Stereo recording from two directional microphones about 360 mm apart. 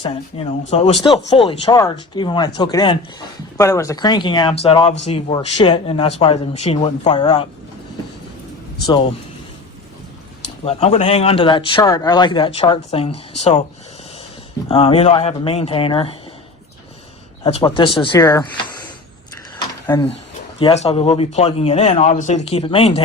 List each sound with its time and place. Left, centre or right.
0.7 s speech: centre
10.4 s speech: centre
14.7 s speech: centre
17.4 s speech: centre
19.5 s a sound: centre
20.6 s speech: centre